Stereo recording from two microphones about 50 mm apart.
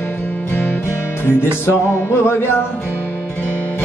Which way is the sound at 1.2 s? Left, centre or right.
Left.